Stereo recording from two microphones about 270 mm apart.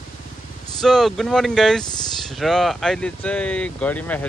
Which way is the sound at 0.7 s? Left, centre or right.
Centre.